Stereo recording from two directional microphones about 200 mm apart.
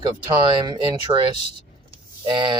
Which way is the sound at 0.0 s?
20° right (ahead or behind).